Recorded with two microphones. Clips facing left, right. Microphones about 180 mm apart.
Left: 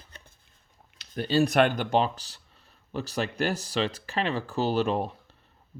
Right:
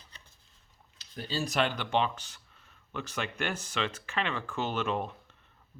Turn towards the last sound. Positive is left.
turn(degrees=35)  # may be behind; listen again after turning